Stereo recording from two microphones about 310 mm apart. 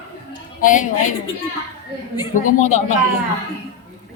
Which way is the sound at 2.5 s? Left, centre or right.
Left.